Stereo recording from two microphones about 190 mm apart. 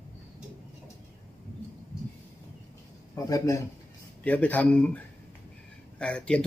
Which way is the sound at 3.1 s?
15° left (ahead or behind).